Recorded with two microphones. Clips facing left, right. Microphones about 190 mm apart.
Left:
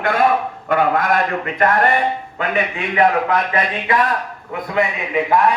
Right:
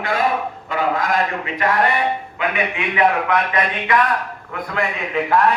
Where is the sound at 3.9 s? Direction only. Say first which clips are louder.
Even; 25° left (ahead or behind).